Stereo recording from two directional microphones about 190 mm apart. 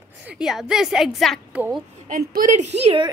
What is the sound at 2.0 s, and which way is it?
A woman's voice, 45° right (ahead or behind).